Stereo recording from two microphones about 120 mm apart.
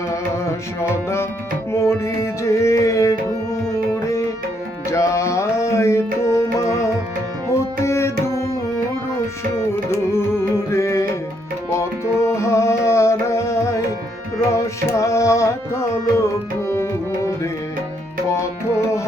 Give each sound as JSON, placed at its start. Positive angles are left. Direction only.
{"t": 0.8, "sound": "music", "side_deg": 20}
{"t": 4.9, "sound": "music", "side_deg": 25}
{"t": 9.6, "sound": "music", "side_deg": 20}
{"t": 14.3, "sound": "tabla", "side_deg": 25}